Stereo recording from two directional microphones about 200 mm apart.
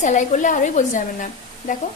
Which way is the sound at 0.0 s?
35° left (ahead or behind).